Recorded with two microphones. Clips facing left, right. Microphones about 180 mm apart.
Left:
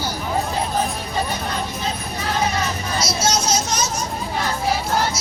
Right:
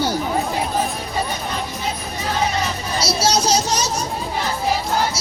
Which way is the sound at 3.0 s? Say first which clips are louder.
Right 3 dB; 35° right (ahead or behind).